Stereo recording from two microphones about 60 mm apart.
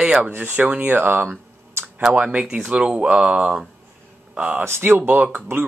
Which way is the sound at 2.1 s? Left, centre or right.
Centre.